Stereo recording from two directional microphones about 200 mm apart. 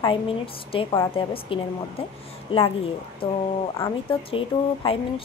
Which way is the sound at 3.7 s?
20° left (ahead or behind).